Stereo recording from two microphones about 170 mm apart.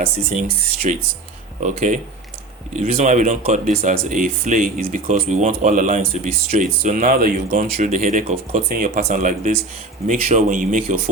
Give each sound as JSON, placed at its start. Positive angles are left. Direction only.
{"t": 0.0, "sound": "speech", "side_deg": -35}
{"t": 3.8, "sound": "speech", "side_deg": -35}
{"t": 4.1, "sound": "speech", "side_deg": -50}